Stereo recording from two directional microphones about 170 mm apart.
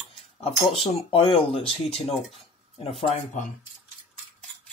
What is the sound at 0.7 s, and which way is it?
Speech, 35° left (ahead or behind).